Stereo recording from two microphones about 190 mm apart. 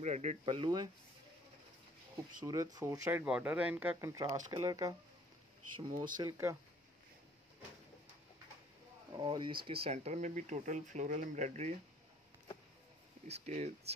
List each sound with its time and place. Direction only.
0.0 s speech: 40° right (ahead or behind)
2.4 s speech: 15° right (ahead or behind)
9.1 s speech: 25° right (ahead or behind)
13.3 s speech: 40° right (ahead or behind)